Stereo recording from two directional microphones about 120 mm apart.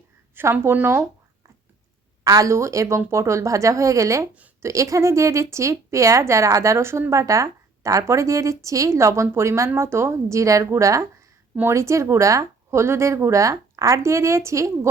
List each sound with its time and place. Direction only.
0.3 s a woman's voice: 20° right (ahead or behind)
2.2 s a woman's voice: 30° right (ahead or behind)